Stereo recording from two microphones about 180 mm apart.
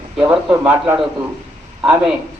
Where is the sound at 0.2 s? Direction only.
10° right (ahead or behind).